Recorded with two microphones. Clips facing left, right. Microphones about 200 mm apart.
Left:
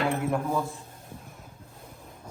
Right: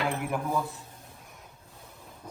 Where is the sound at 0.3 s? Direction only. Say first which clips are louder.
Left 3 dB; centre (ahead or behind).